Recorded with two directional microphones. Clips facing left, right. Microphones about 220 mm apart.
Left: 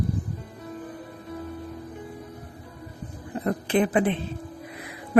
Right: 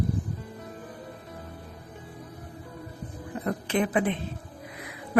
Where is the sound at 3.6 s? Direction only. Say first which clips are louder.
Left 4 dB; 30° left (ahead or behind).